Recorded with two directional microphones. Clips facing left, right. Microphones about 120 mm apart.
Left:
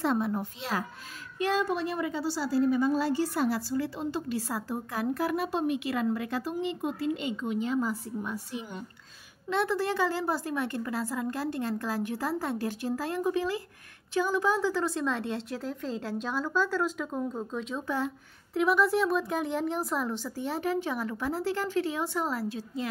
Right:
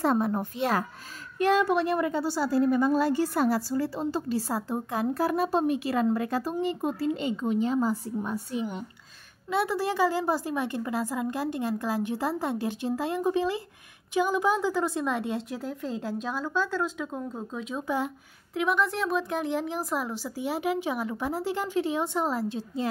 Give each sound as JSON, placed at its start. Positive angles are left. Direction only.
{"t": 0.0, "sound": "a child's voice", "side_deg": -45}
{"t": 1.4, "sound": "a woman's voice", "side_deg": -65}
{"t": 9.5, "sound": "a woman's voice", "side_deg": -10}
{"t": 18.5, "sound": "speech", "side_deg": 0}